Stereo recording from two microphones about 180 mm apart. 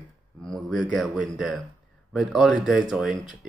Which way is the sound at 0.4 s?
Centre (ahead or behind).